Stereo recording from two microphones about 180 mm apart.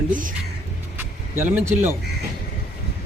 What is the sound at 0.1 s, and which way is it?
Speech, 50° right (ahead or behind).